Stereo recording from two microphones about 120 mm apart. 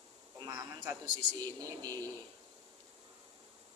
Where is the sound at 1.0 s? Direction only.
40° right (ahead or behind).